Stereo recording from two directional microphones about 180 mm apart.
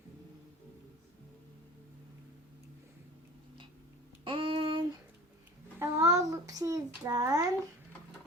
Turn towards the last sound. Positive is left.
turn(degrees=-20)  # may be behind; listen again after turning